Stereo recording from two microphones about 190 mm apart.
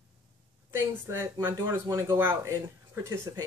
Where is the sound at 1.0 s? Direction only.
15° right (ahead or behind).